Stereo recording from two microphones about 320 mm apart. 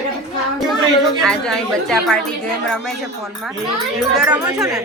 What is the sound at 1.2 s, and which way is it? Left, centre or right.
A woman's voice, centre.